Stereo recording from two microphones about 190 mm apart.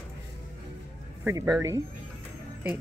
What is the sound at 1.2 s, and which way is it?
Speech, 20° right (ahead or behind).